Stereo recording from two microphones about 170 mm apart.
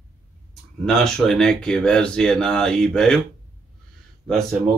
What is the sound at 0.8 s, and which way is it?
Speech, 5° left (ahead or behind).